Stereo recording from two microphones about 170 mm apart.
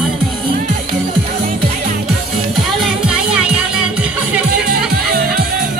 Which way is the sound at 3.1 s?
5° right (ahead or behind).